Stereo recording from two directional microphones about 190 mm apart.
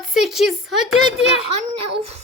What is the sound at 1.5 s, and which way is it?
Speech, 35° right (ahead or behind).